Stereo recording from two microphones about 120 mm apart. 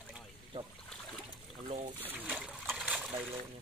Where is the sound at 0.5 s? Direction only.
50° right (ahead or behind).